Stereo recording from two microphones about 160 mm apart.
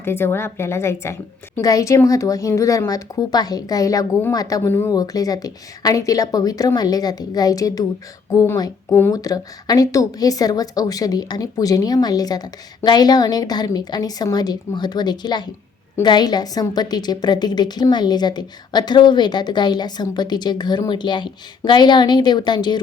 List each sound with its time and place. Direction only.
0.0 s a woman's voice: 15° left (ahead or behind)